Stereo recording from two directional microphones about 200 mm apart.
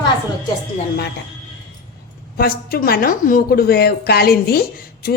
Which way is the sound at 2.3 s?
45° left (ahead or behind).